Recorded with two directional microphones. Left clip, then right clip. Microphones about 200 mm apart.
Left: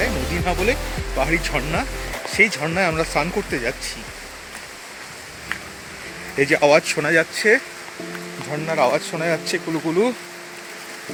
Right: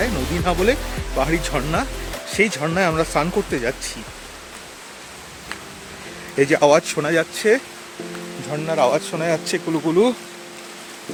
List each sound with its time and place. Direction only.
0.0 s music: 30° right (ahead or behind)
1.2 s speech: 25° right (ahead or behind)
6.3 s speech: 20° right (ahead or behind)
8.6 s speech: 10° right (ahead or behind)